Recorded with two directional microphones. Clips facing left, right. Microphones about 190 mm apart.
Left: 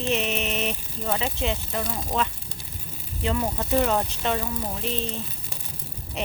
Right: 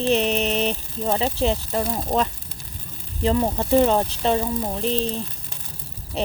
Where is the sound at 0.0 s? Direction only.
35° right (ahead or behind).